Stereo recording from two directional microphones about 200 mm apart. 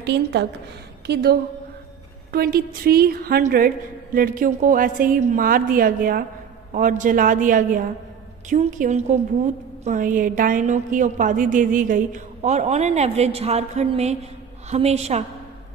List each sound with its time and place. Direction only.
0.0 s a woman's voice: 60° right (ahead or behind); by 15.2 s 35° right (ahead or behind)